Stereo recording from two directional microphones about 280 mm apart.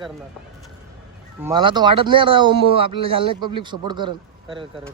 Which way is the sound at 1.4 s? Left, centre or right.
Centre.